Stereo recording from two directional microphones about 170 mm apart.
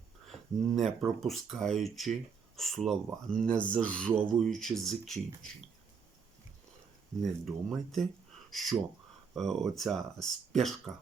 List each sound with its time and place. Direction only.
0.8 s speech: centre (ahead or behind)
7.2 s speech: centre (ahead or behind)